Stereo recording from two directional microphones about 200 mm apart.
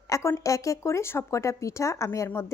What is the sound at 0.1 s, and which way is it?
Speech, 15° left (ahead or behind).